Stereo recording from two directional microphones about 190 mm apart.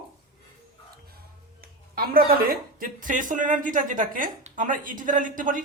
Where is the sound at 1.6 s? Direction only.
50° right (ahead or behind).